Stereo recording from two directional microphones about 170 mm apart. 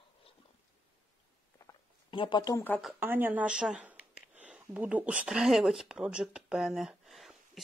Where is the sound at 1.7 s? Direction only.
30° left (ahead or behind).